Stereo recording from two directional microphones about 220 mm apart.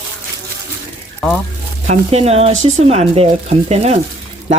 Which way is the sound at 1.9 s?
30° right (ahead or behind).